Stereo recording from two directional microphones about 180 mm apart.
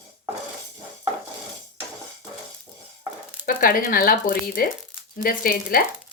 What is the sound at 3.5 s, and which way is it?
Speech, 50° left (ahead or behind).